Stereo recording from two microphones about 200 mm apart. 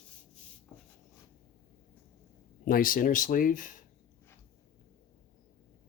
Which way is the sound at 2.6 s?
45° left (ahead or behind).